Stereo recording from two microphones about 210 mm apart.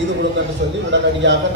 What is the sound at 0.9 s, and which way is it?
Speech, 60° right (ahead or behind).